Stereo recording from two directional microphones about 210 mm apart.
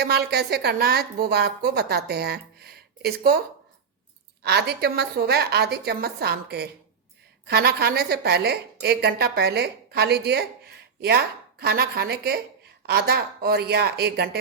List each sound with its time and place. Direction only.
0.0 s a woman's voice: 50° right (ahead or behind)
4.4 s a woman's voice: 50° right (ahead or behind)